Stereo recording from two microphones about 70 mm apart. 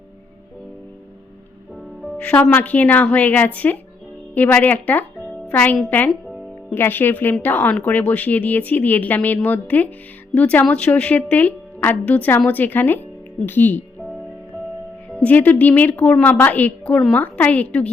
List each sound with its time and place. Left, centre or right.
2.1 s speech: left
6.1 s music: centre
6.7 s speech: left
15.2 s speech: left